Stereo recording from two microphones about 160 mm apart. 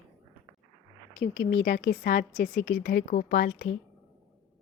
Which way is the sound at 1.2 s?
75° left (ahead or behind).